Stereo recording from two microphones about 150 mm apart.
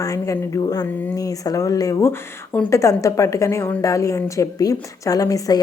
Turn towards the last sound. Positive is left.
turn(degrees=25)  # may be behind; listen again after turning